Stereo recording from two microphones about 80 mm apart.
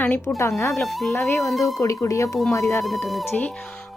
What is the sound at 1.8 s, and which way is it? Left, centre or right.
Speech, left.